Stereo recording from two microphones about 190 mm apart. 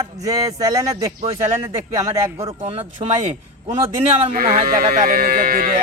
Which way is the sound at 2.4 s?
30° right (ahead or behind).